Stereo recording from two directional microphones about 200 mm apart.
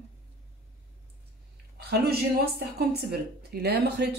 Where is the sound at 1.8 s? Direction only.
55° right (ahead or behind).